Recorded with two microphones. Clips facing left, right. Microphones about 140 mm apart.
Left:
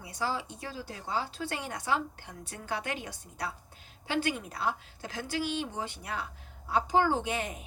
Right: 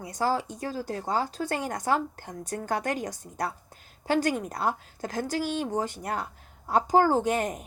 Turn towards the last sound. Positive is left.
turn(degrees=-45)  # may be behind; listen again after turning